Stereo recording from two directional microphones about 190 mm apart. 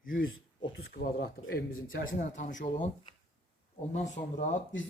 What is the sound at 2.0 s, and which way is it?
Speech, 45° left (ahead or behind).